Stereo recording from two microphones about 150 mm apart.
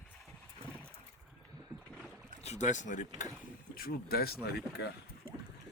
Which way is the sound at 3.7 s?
85° left.